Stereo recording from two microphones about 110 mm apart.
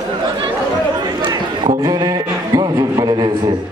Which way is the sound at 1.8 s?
35° right (ahead or behind).